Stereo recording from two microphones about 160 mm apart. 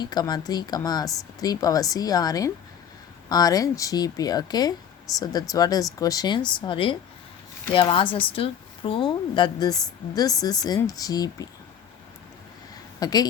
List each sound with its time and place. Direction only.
0.0 s a woman's voice: 25° left (ahead or behind)
13.0 s speech: 25° left (ahead or behind)